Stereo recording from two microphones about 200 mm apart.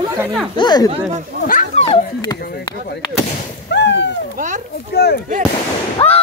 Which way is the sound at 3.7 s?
60° left (ahead or behind).